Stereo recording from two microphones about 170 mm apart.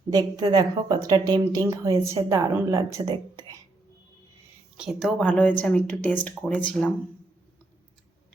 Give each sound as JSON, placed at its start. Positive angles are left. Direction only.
{"t": 0.1, "sound": "a woman's voice", "side_deg": -20}
{"t": 4.8, "sound": "speech", "side_deg": 0}